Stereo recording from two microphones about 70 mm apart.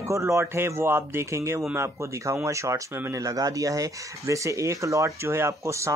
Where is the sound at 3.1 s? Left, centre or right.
Right.